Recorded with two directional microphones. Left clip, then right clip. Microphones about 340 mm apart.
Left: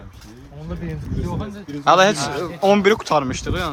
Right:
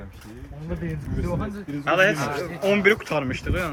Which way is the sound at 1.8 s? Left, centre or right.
Centre.